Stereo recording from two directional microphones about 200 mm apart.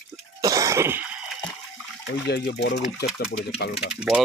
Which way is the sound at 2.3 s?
55° left (ahead or behind).